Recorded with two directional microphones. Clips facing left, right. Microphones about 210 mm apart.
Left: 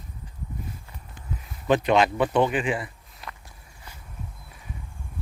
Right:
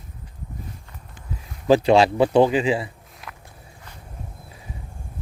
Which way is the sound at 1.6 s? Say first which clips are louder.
Right 5 dB; 30° right (ahead or behind).